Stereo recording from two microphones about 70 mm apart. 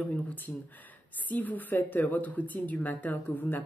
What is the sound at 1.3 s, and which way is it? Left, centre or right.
A woman's voice, left.